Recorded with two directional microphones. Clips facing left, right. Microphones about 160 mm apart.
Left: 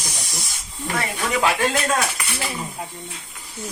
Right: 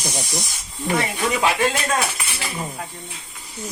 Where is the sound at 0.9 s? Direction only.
15° right (ahead or behind).